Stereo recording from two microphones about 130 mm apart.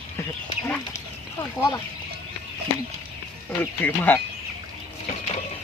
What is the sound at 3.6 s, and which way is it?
Speech, 15° left (ahead or behind).